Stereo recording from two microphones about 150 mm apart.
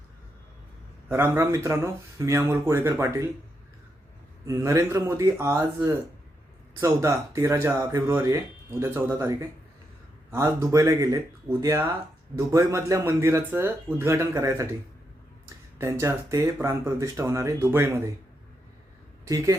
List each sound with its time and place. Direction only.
1.0 s speech: 15° right (ahead or behind)
4.4 s speech: 20° right (ahead or behind)
15.8 s speech: 20° right (ahead or behind)
19.2 s speech: 20° right (ahead or behind)